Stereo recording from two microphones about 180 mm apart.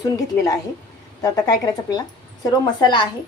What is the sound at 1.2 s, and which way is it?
A woman's voice, 20° left (ahead or behind).